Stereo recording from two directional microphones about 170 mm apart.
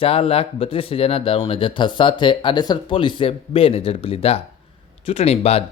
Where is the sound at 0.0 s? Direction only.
35° left (ahead or behind).